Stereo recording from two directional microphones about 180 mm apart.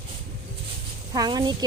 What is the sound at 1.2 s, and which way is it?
Speech, 25° right (ahead or behind).